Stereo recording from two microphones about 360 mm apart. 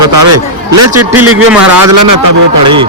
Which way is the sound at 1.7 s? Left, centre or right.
Right.